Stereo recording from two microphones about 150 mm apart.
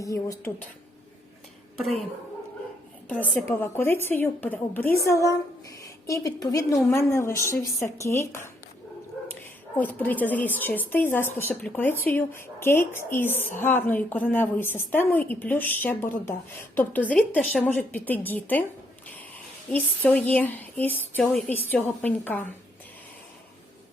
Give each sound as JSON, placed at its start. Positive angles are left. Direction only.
{"t": 0.0, "sound": "a woman's voice", "side_deg": 20}
{"t": 3.4, "sound": "a woman's voice", "side_deg": 15}
{"t": 19.7, "sound": "a woman's voice", "side_deg": 10}